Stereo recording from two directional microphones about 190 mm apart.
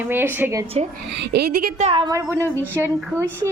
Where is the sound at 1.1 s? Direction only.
55° right (ahead or behind).